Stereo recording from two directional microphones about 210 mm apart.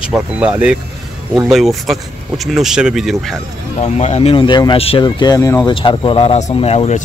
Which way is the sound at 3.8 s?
30° left (ahead or behind).